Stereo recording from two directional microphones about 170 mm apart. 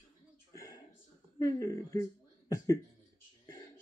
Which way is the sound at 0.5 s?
20° left (ahead or behind).